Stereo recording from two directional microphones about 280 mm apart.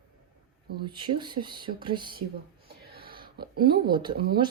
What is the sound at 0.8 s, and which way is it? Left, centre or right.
Speech, centre.